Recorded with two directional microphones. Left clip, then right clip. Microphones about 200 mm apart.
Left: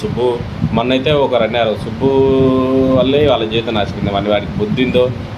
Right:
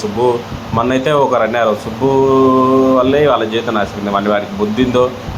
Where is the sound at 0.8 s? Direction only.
5° left (ahead or behind).